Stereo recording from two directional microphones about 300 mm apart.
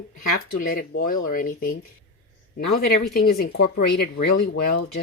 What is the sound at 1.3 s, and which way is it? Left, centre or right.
Speech, left.